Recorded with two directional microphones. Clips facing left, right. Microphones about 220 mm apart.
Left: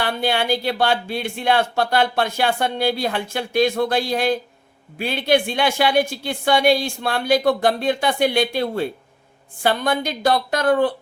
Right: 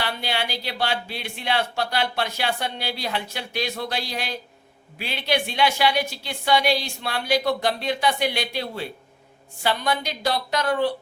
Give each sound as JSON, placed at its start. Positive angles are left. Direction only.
{"t": 0.0, "sound": "speech", "side_deg": 50}